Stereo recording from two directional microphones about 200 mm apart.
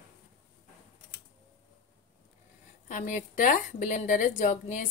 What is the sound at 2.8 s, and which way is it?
A woman's voice, 40° left (ahead or behind).